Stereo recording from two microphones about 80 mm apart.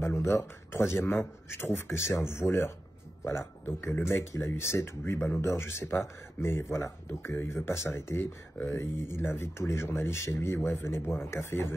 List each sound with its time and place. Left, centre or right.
0.0 s speech: left